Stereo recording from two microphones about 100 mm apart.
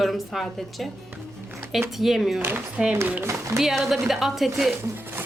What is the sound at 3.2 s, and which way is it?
Speech, 30° right (ahead or behind).